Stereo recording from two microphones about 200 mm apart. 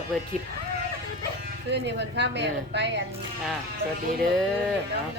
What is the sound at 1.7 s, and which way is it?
Speech, 60° right (ahead or behind).